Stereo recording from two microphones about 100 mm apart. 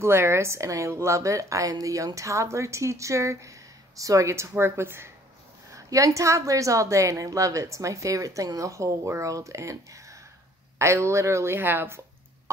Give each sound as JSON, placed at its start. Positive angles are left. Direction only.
{"t": 0.0, "sound": "a woman's voice", "side_deg": -25}